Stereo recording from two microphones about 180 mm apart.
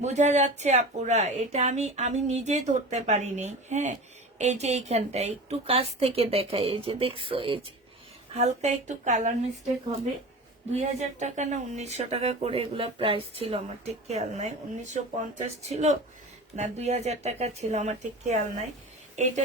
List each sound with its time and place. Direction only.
0.0 s speech: 40° right (ahead or behind)
10.7 s speech: 40° right (ahead or behind)